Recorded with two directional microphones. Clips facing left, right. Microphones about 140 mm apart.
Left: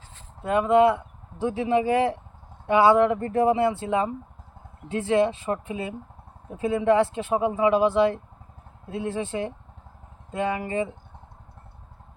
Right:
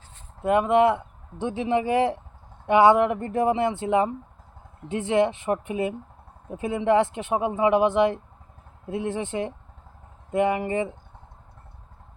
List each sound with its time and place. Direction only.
0.4 s speech: 20° right (ahead or behind)